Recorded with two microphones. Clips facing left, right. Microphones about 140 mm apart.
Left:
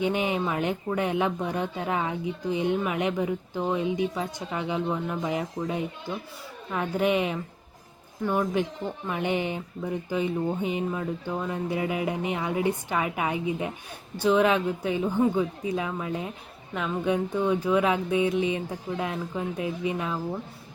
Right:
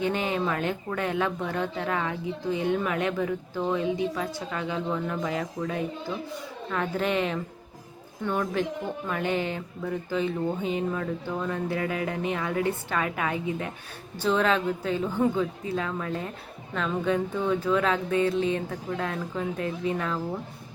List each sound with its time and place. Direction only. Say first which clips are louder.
0.0 s speech: left 1 dB; 15° left (ahead or behind)